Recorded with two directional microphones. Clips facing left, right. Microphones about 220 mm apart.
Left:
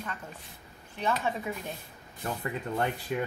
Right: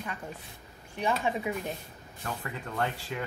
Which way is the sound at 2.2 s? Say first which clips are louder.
Left 4 dB; 20° left (ahead or behind).